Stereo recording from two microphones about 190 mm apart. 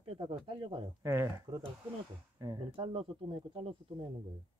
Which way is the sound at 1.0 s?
15° right (ahead or behind).